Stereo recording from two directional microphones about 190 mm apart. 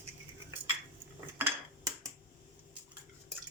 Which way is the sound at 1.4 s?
15° right (ahead or behind).